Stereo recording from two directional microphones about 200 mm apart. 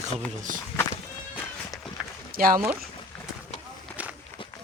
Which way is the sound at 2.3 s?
45° right (ahead or behind).